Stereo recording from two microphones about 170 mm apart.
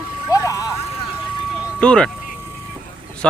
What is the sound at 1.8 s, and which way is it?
Speech, 5° left (ahead or behind).